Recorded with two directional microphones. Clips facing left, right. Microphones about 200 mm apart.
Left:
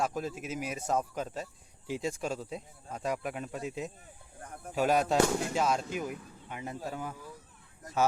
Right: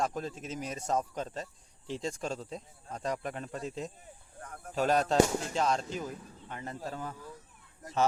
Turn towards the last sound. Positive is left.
turn(degrees=10)  # may be behind; listen again after turning